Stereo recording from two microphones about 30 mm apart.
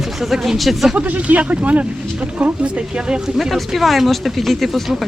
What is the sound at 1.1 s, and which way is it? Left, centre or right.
Speech, right.